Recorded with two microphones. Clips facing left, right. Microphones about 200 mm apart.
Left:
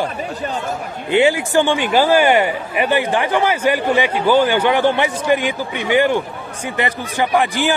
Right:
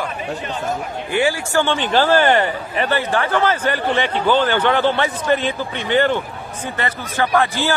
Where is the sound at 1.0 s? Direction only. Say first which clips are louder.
Left 5 dB; 20° left (ahead or behind).